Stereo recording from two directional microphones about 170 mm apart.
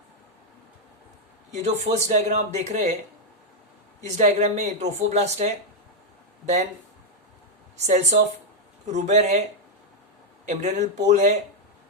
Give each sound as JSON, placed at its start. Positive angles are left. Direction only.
{"t": 1.6, "sound": "speech", "side_deg": -45}
{"t": 4.2, "sound": "speech", "side_deg": -40}
{"t": 7.8, "sound": "speech", "side_deg": -40}
{"t": 10.4, "sound": "speech", "side_deg": -45}